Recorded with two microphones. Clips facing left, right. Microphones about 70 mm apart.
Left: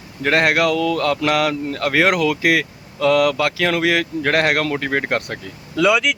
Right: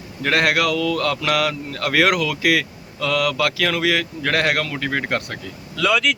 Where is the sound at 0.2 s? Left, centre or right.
Left.